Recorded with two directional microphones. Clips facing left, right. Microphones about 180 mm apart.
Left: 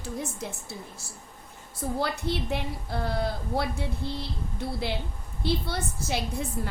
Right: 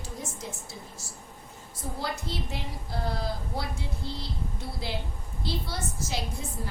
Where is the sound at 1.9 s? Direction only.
65° left (ahead or behind).